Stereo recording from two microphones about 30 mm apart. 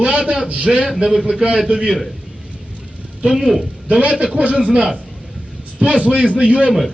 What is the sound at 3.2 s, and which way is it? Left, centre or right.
Speech, centre.